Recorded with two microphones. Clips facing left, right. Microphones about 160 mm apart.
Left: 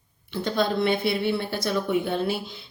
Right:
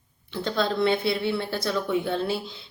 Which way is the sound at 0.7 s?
55° left (ahead or behind).